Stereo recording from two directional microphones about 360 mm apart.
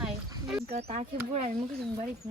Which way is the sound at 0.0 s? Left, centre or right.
Centre.